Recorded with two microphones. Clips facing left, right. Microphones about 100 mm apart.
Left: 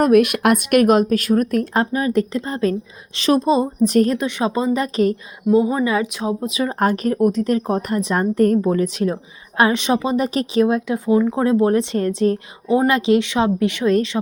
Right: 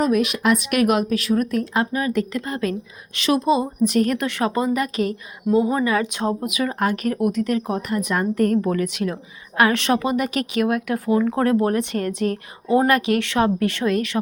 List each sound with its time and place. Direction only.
0.0 s speech: 55° left (ahead or behind); by 4.1 s 35° left (ahead or behind)
4.1 s speech: 20° left (ahead or behind)
5.5 s speech: 10° left (ahead or behind)
6.1 s speech: centre (ahead or behind)
6.4 s speech: 30° left (ahead or behind)
9.6 s speech: 20° left (ahead or behind)
10.2 s speech: 30° left (ahead or behind)